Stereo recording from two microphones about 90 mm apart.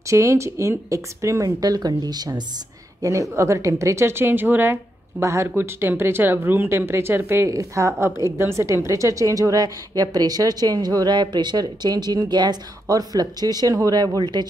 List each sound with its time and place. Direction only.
0.1 s speech: 35° right (ahead or behind); by 2.4 s 50° right (ahead or behind)
3.0 s speech: 35° right (ahead or behind); by 12.5 s 55° right (ahead or behind)
12.8 s speech: 45° right (ahead or behind)